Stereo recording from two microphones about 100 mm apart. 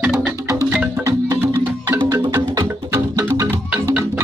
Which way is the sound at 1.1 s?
35° right (ahead or behind).